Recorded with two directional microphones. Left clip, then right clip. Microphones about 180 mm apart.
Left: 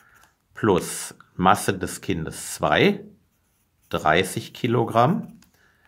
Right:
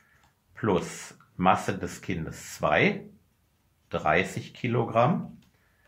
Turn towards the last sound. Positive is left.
turn(degrees=35)  # may be behind; listen again after turning